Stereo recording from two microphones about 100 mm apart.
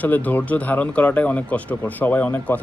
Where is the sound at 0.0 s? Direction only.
15° left (ahead or behind).